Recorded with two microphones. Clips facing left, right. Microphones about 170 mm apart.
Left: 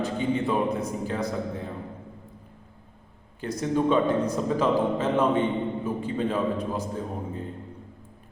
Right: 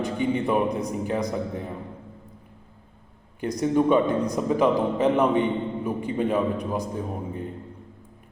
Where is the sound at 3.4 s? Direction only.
15° right (ahead or behind).